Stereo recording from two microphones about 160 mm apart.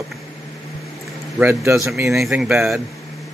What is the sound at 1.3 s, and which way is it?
Speech, 10° right (ahead or behind).